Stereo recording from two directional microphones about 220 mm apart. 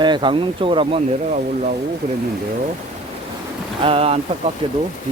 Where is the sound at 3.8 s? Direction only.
25° right (ahead or behind).